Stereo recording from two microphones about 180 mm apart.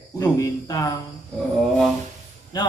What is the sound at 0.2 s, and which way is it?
Speech, 20° left (ahead or behind).